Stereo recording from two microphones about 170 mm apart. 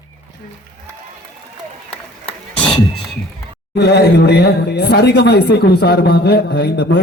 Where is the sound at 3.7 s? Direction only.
75° left (ahead or behind).